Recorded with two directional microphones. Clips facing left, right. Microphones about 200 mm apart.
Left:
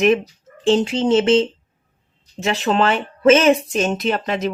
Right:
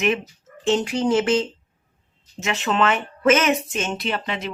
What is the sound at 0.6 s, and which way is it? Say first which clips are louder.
Speech: left 4 dB; 30° left (ahead or behind).